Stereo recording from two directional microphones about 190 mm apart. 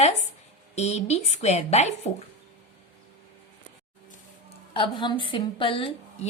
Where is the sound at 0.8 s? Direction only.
35° left (ahead or behind).